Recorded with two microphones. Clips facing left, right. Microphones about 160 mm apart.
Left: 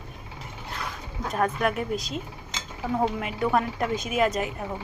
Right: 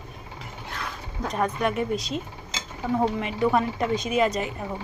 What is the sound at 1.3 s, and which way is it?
A woman's voice, centre (ahead or behind).